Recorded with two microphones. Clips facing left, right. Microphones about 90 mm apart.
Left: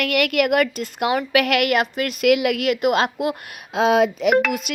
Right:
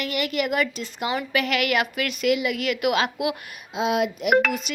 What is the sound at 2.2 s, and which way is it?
Speech, 70° left (ahead or behind).